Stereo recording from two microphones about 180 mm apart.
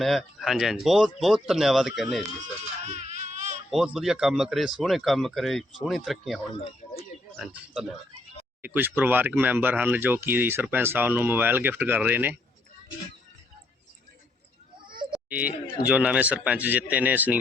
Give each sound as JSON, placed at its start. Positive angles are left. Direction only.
{"t": 0.0, "sound": "speech", "side_deg": 0}
{"t": 2.8, "sound": "baby cry", "side_deg": -40}
{"t": 3.7, "sound": "speech", "side_deg": 0}
{"t": 15.1, "sound": "children playing", "side_deg": -10}
{"t": 15.9, "sound": "speech", "side_deg": -5}